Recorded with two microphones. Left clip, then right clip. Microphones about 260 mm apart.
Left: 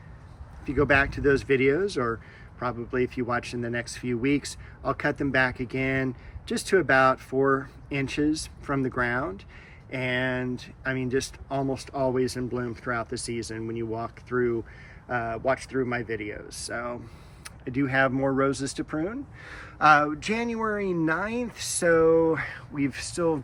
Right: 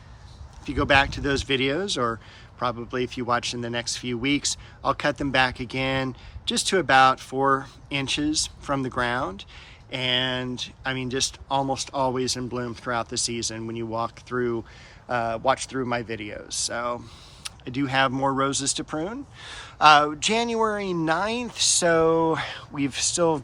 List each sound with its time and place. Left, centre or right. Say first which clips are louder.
0.6 s speech: right 2 dB; centre